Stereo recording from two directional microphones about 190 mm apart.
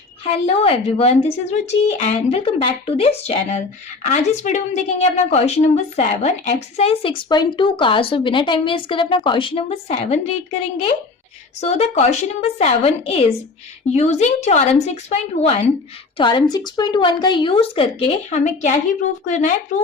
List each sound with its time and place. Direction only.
0.3 s a woman's voice: 30° left (ahead or behind)
11.6 s a woman's voice: 35° left (ahead or behind)